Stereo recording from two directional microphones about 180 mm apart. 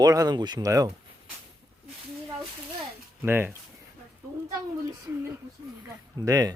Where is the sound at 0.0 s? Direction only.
20° right (ahead or behind).